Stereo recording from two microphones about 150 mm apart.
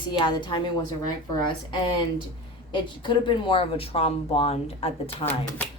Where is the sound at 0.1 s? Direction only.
30° left (ahead or behind).